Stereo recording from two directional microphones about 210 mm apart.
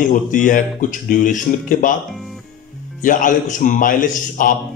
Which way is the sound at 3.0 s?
40° left (ahead or behind).